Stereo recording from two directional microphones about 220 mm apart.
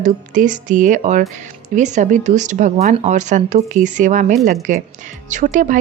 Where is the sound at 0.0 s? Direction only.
35° right (ahead or behind).